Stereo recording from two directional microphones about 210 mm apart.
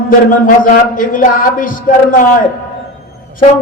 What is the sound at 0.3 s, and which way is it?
Speech, 40° left (ahead or behind).